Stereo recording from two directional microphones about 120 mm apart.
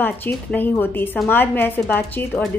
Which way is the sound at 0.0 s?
15° left (ahead or behind).